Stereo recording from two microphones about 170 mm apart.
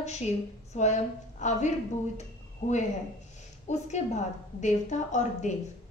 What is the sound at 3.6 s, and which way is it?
A woman's voice, 40° left (ahead or behind).